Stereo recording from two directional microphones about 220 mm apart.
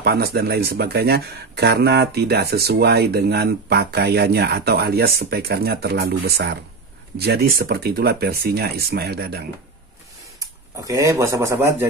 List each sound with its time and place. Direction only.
0.0 s speech: 45° right (ahead or behind)
10.4 s speech: 15° right (ahead or behind)